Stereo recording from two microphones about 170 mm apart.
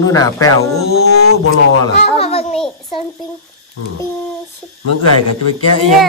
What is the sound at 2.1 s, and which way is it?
Speech, 35° left (ahead or behind).